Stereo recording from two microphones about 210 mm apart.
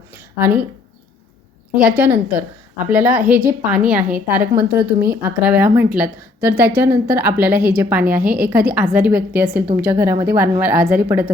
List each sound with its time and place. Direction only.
0.3 s a woman's voice: 10° right (ahead or behind)
1.8 s a woman's voice: 5° right (ahead or behind)
4.8 s a woman's voice: 50° right (ahead or behind)
5.1 s a woman's voice: 10° right (ahead or behind)